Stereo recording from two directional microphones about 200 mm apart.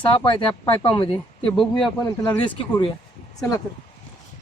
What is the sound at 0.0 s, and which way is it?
Speech, 25° left (ahead or behind).